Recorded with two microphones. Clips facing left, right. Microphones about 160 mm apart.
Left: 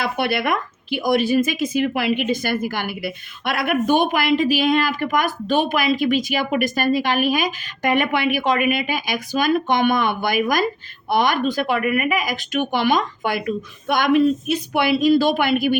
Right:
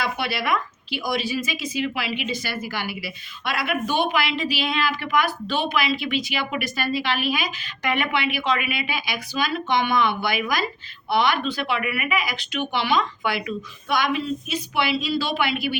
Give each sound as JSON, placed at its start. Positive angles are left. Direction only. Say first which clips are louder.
{"t": 0.0, "sound": "a woman's voice", "louder": "left 5 dB", "side_deg": 55}